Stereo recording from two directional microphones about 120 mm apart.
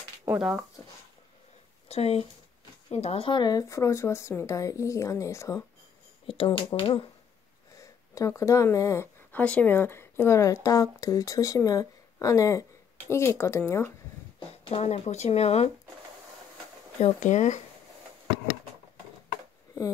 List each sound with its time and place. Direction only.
1.9 s speech: 60° left (ahead or behind); by 5.6 s 25° left (ahead or behind)
6.2 s speech: 45° left (ahead or behind)
7.7 s a sound: 25° left (ahead or behind)
9.4 s speech: 10° left (ahead or behind)
14.7 s speech: 65° left (ahead or behind)
17.0 s speech: 90° left